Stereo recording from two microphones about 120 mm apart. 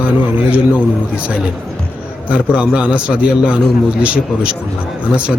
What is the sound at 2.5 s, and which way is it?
Speech, 10° right (ahead or behind).